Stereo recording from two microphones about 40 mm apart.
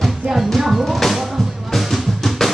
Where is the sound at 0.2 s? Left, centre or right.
Right.